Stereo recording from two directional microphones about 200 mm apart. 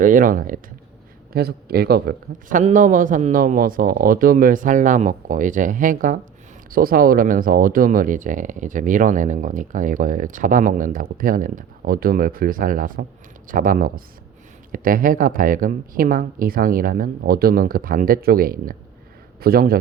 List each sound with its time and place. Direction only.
0.0 s a man's voice: 40° right (ahead or behind)